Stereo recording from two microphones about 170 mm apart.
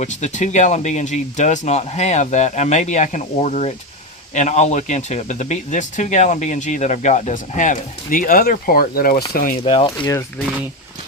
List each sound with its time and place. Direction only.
0.0 s speech: 45° left (ahead or behind)
9.6 s speech: 35° left (ahead or behind)
10.1 s speech: 15° left (ahead or behind)